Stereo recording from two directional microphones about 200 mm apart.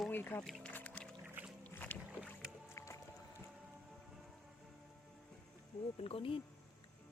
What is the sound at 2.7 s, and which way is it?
Music, 15° left (ahead or behind).